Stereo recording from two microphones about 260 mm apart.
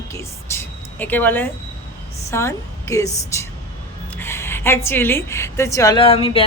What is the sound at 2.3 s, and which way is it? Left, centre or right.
A woman's voice, centre.